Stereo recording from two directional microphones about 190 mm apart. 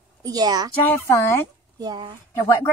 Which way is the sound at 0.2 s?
20° right (ahead or behind).